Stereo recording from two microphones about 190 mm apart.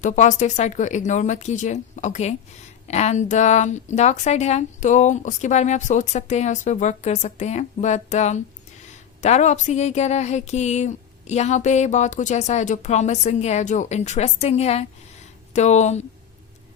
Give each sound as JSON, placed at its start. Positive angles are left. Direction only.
{"t": 0.0, "sound": "speech", "side_deg": 40}